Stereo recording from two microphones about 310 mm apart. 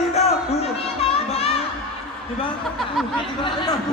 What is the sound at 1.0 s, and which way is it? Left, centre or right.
Music, centre.